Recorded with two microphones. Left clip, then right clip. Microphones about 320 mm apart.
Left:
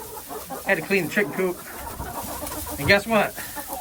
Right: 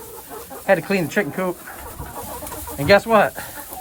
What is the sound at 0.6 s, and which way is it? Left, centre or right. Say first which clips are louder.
Speech: right 4 dB; centre.